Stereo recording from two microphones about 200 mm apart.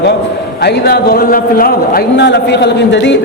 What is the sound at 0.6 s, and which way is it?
A man's voice, 55° left (ahead or behind).